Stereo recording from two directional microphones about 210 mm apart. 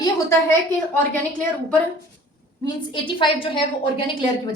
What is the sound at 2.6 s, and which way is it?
A woman's voice, 25° left (ahead or behind).